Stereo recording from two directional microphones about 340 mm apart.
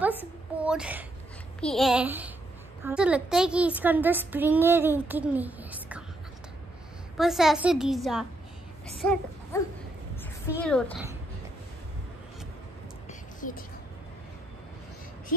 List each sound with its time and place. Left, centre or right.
0.2 s a woman's voice: centre
7.2 s a woman's voice: centre
13.4 s speech: left